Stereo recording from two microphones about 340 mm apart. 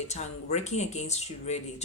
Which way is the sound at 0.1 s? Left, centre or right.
Centre.